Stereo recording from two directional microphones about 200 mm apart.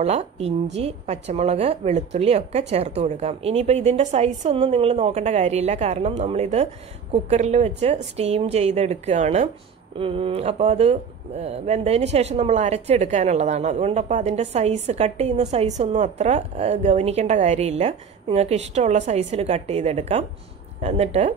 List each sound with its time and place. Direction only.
0.0 s speech: 35° right (ahead or behind)